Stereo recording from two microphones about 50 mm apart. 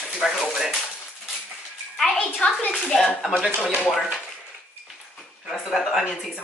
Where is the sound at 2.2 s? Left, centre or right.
Left.